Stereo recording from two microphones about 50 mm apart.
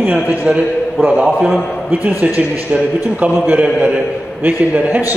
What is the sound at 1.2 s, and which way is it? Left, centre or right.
Speech, centre.